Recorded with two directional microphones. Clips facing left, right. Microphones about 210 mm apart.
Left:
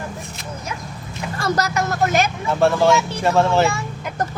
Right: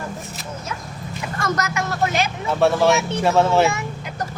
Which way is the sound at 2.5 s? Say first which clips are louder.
Even; centre (ahead or behind).